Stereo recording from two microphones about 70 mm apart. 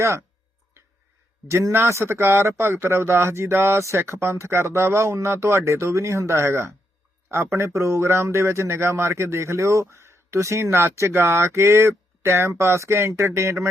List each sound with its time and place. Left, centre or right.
1.5 s a man's voice: right